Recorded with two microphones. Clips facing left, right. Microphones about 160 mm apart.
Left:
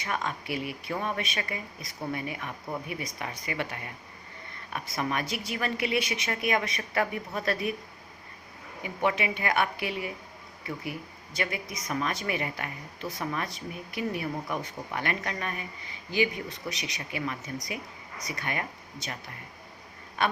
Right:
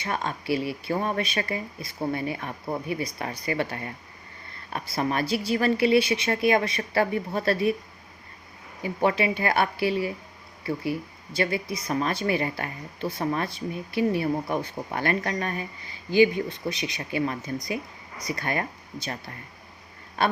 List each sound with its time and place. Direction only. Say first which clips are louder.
0.0 s a woman's voice: right 3 dB; 30° right (ahead or behind)
8.8 s a woman's voice: right 5 dB; 35° right (ahead or behind)
20.2 s a sound: right 4 dB; 35° right (ahead or behind)